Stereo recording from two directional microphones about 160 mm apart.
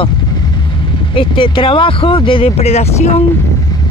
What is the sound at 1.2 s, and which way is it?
Speech, 30° left (ahead or behind).